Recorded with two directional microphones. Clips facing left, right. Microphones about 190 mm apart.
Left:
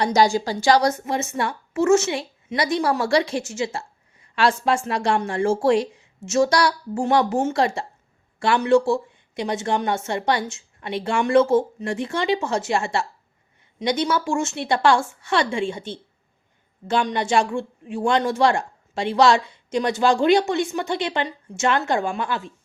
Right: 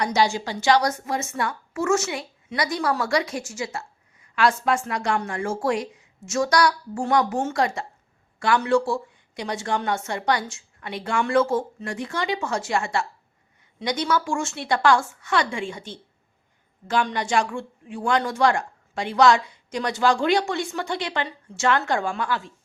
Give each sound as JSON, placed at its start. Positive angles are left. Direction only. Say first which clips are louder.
{"t": 0.0, "sound": "a woman's voice", "louder": "left 4 dB", "side_deg": 35}